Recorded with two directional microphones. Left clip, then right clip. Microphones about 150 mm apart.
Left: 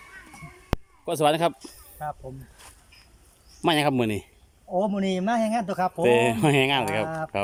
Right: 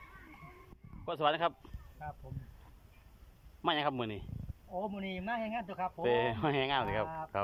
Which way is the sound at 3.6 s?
25° left (ahead or behind).